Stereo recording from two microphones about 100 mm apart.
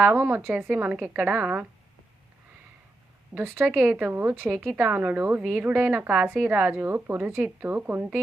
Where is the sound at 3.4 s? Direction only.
20° right (ahead or behind).